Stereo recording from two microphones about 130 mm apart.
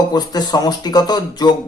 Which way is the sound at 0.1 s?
30° left (ahead or behind).